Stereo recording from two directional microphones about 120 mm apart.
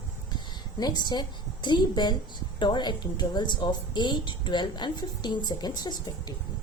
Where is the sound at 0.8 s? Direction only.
35° left (ahead or behind).